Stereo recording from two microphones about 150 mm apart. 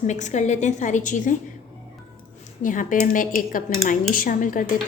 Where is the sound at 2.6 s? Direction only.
60° left (ahead or behind).